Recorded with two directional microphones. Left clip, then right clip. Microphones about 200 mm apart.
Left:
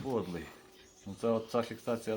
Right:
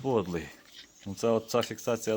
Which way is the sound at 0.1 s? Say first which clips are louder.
Right 7 dB; 55° right (ahead or behind).